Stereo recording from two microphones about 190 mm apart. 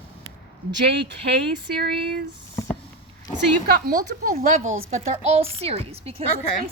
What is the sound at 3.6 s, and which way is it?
A woman's voice, 50° right (ahead or behind).